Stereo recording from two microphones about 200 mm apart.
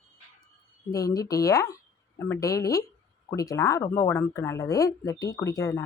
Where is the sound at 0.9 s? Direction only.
15° left (ahead or behind).